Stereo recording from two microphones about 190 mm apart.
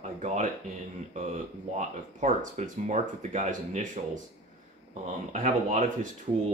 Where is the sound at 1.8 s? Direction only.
40° right (ahead or behind).